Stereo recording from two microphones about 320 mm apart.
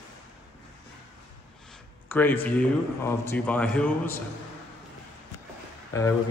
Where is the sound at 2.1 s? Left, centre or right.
Centre.